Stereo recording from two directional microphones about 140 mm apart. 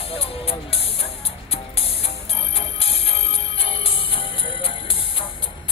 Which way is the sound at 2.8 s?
45° left (ahead or behind).